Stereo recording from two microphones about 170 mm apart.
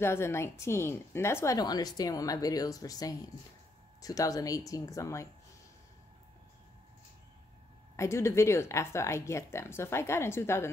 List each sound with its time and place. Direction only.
0.0 s a woman's voice: 15° left (ahead or behind)
7.9 s speech: 15° left (ahead or behind)